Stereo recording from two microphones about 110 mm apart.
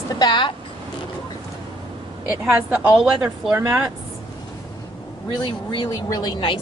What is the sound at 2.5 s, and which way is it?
Speech, 15° right (ahead or behind).